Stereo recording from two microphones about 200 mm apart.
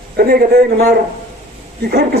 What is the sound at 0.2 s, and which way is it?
Speech, 50° right (ahead or behind).